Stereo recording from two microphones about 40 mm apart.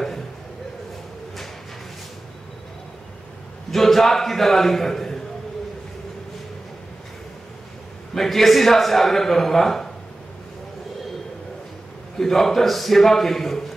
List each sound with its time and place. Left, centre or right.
3.7 s a man's voice: centre
8.1 s a man's voice: centre
12.2 s a man's voice: centre